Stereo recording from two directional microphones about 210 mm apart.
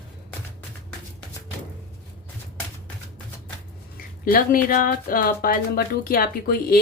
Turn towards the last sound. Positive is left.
turn(degrees=45)  # may be behind; listen again after turning